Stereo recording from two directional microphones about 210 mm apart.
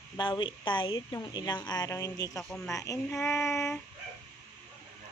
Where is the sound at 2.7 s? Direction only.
15° left (ahead or behind).